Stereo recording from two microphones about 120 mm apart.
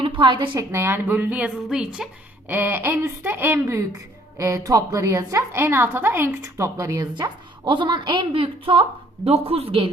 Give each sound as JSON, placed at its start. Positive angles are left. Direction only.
{"t": 0.0, "sound": "a woman's voice", "side_deg": -40}
{"t": 0.7, "sound": "speech", "side_deg": -20}
{"t": 2.5, "sound": "a woman's voice", "side_deg": -15}
{"t": 7.1, "sound": "a woman's voice", "side_deg": -40}